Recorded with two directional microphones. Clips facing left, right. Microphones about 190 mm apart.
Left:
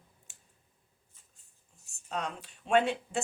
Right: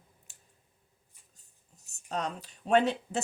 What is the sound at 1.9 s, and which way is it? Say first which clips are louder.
Speech: right 2 dB; 40° right (ahead or behind).